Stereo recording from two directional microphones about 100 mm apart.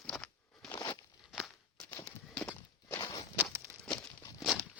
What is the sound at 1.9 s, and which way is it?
Horse, 20° left (ahead or behind).